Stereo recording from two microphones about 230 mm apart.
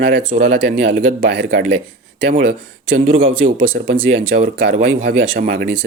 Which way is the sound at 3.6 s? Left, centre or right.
Right.